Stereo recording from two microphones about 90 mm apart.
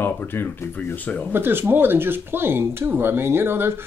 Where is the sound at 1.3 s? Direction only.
25° right (ahead or behind).